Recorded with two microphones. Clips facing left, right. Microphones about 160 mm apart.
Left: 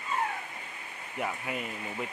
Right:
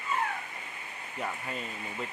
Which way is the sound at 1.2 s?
10° left (ahead or behind).